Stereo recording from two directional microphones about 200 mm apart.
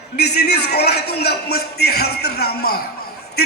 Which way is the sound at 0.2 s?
55° left (ahead or behind).